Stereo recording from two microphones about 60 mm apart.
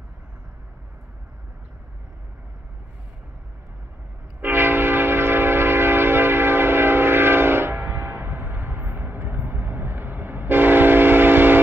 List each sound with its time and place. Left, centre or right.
4.4 s train: right